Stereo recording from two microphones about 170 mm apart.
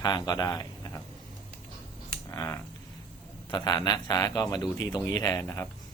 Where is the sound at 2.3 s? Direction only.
20° left (ahead or behind).